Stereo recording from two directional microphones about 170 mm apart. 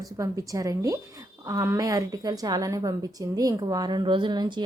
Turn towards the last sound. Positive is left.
turn(degrees=-25)  # may be behind; listen again after turning